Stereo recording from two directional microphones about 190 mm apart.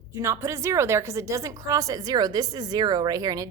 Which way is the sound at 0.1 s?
15° right (ahead or behind).